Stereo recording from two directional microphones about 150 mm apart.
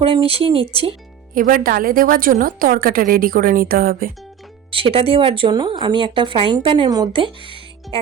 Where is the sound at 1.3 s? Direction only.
65° right (ahead or behind).